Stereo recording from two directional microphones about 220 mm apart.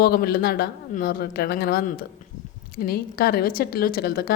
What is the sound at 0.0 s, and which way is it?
A woman's voice, 45° left (ahead or behind).